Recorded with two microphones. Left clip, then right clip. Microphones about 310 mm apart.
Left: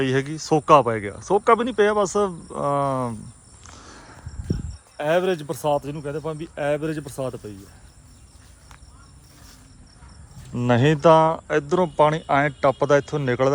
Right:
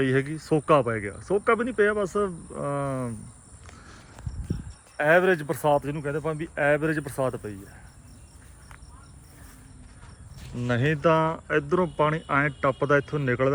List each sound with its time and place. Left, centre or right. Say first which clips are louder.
0.0 s speech: left 2 dB; centre
4.9 s speech: right 1 dB; centre
10.6 s speech: left 6 dB; left